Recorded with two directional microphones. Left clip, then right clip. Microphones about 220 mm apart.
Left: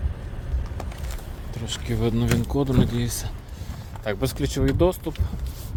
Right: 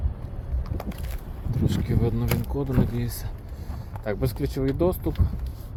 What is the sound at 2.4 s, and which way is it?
Speech, 25° left (ahead or behind).